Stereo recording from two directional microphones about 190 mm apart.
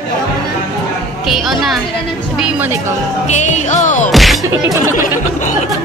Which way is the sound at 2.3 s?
5° right (ahead or behind).